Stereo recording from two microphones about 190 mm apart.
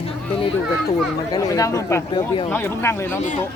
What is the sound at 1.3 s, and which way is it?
Speech, 20° left (ahead or behind).